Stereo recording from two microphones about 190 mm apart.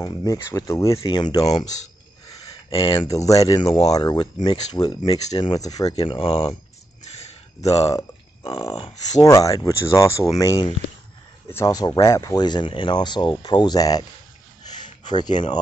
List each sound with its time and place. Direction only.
0.0 s speech: 15° left (ahead or behind)
5.9 s speech: 30° left (ahead or behind)
7.7 s a sound: 20° left (ahead or behind)
8.5 s speech: 25° left (ahead or behind)
9.2 s speech: 20° left (ahead or behind)
15.0 s speech: 20° left (ahead or behind)